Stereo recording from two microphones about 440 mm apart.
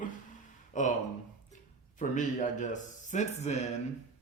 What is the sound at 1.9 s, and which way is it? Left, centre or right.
Speech, centre.